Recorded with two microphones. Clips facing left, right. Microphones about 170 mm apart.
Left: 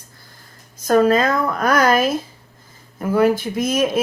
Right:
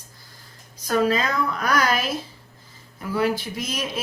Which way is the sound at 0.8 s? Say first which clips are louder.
Left 7 dB; 45° left (ahead or behind).